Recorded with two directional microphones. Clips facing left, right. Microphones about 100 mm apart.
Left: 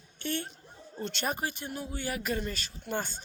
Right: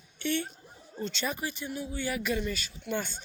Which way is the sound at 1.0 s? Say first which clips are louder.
Even; 55° left (ahead or behind).